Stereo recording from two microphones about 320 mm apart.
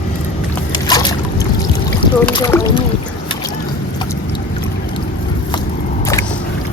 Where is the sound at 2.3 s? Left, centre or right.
Centre.